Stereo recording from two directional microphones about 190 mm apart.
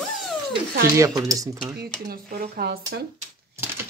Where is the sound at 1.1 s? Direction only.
20° right (ahead or behind).